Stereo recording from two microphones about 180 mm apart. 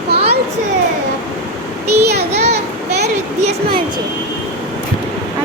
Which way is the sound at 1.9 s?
65° right (ahead or behind).